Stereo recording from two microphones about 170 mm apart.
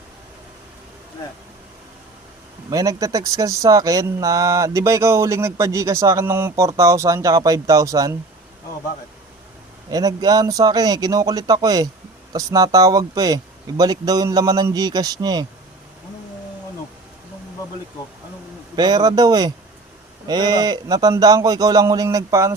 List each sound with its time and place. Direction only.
2.6 s speech: 20° right (ahead or behind)
9.9 s speech: 20° right (ahead or behind)
18.8 s speech: 25° right (ahead or behind)